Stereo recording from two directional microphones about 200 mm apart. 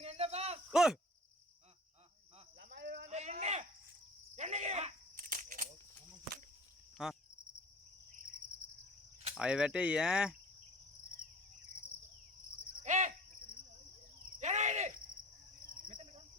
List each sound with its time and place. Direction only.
0.0 s a sound: 30° right (ahead or behind)
0.7 s speech: centre (ahead or behind)
2.6 s cricket: 55° right (ahead or behind)
3.1 s cricket: 35° right (ahead or behind)
4.4 s a sound: 35° right (ahead or behind)
6.9 s cricket: centre (ahead or behind)
9.3 s speech: 5° right (ahead or behind)
12.8 s cricket: 35° right (ahead or behind)
14.3 s cricket: 35° right (ahead or behind)